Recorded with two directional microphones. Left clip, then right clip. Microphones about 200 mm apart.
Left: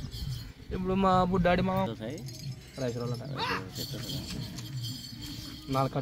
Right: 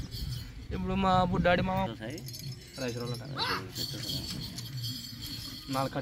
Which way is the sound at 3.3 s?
25° left (ahead or behind).